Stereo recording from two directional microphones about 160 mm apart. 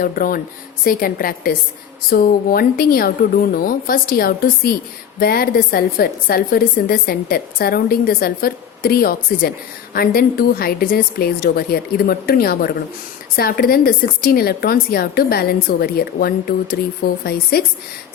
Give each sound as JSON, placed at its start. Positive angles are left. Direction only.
{"t": 0.0, "sound": "a woman's voice", "side_deg": 65}